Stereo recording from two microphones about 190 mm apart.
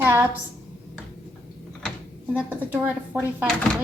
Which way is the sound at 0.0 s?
15° right (ahead or behind).